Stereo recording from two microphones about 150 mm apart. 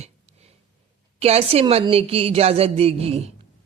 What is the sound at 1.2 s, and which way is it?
A man's voice, 45° right (ahead or behind).